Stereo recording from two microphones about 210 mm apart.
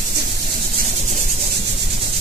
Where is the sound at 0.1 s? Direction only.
50° right (ahead or behind).